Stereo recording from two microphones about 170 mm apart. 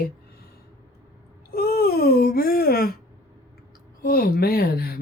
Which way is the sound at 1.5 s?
65° left (ahead or behind).